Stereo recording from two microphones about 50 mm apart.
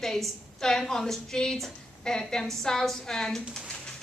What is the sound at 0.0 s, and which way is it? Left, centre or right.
A woman's voice, centre.